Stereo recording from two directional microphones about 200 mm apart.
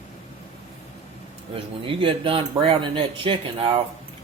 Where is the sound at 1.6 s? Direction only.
25° right (ahead or behind).